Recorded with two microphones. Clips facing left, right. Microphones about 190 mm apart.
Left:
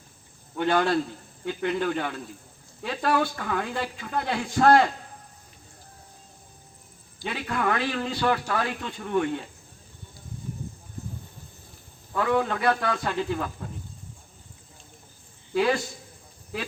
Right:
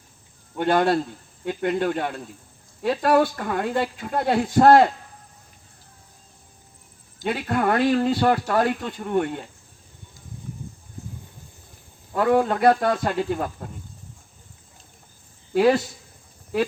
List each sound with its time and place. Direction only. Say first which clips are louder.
0.5 s a man's voice: right 3 dB; 50° right (ahead or behind)
7.2 s a man's voice: right 6 dB; 45° right (ahead or behind)
12.1 s a man's voice: right 5 dB; 45° right (ahead or behind)